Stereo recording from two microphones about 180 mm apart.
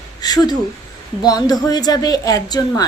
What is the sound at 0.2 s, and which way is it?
A woman's voice, 20° left (ahead or behind).